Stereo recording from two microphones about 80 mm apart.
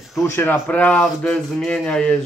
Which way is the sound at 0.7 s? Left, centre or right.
Centre.